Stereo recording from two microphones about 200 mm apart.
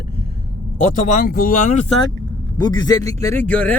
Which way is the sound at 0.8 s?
40° left (ahead or behind).